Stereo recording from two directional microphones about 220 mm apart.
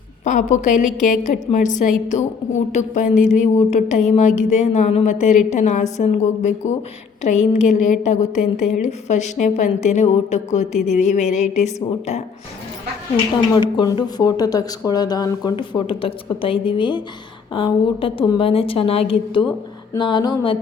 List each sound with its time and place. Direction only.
0.3 s a woman's voice: 35° left (ahead or behind)
13.6 s speech: 20° left (ahead or behind)